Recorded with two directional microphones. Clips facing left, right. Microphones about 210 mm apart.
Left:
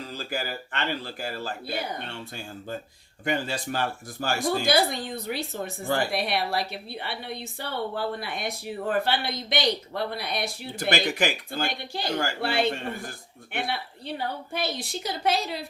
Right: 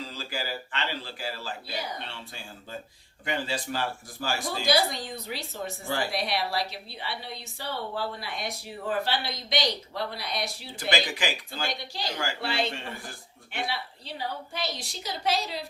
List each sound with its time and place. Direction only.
0.1 s speech: 50° left (ahead or behind)